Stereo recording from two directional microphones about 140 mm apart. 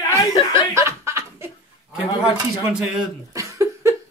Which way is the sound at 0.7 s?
20° right (ahead or behind).